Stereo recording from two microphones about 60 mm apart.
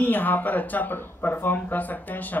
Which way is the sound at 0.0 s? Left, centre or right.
Left.